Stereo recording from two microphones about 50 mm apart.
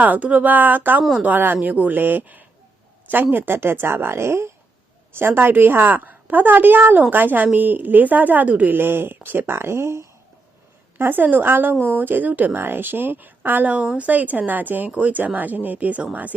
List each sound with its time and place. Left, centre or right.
0.0 s a woman's voice: right
5.1 s a woman's voice: right
10.9 s a woman's voice: right